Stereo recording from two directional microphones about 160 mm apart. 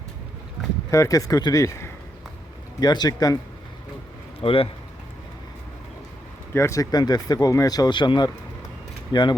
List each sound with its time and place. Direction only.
0.9 s speech: 20° left (ahead or behind)
4.4 s speech: 35° left (ahead or behind)
6.5 s speech: 15° left (ahead or behind)